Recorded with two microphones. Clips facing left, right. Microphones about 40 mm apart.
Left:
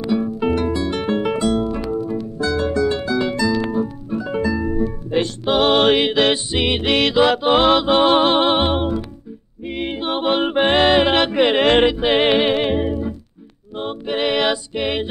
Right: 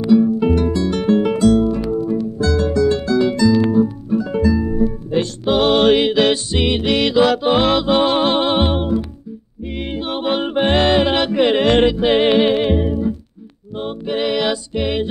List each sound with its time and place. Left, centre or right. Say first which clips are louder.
0.1 s music: right 6 dB; centre